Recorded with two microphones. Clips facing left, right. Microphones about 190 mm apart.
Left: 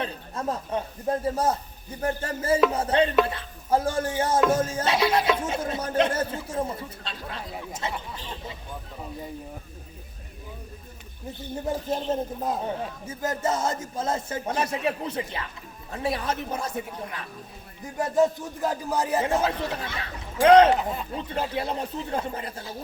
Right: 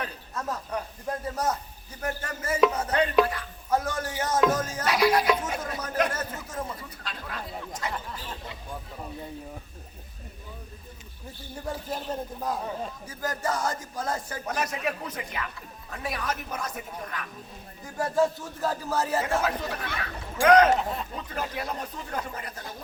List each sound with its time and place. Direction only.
0.0 s music: 30° left (ahead or behind)
11.3 s music: 20° left (ahead or behind)
17.8 s speech: 20° left (ahead or behind)
19.4 s music: 30° left (ahead or behind)
20.7 s speech: centre (ahead or behind)
21.2 s music: 30° left (ahead or behind)